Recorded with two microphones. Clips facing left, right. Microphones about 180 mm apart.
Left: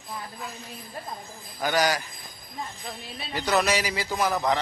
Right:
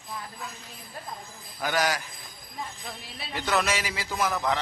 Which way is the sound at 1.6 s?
Centre (ahead or behind).